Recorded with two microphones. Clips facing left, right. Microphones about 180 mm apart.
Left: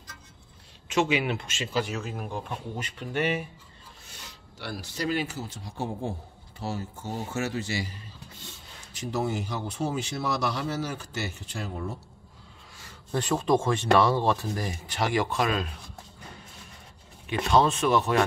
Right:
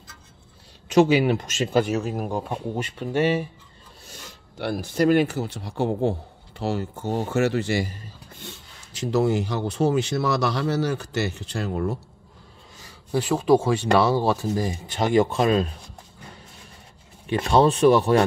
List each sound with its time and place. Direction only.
0.8 s speech: 40° right (ahead or behind)
3.1 s speech: 30° right (ahead or behind)
4.6 s a man's voice: 55° right (ahead or behind)
13.1 s speech: 5° right (ahead or behind); by 15.7 s 30° right (ahead or behind)
17.5 s speech: 30° right (ahead or behind)